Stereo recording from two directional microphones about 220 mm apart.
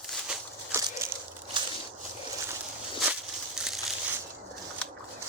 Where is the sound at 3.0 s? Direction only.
5° right (ahead or behind).